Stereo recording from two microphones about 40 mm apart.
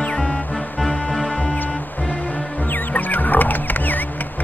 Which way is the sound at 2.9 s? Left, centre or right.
Left.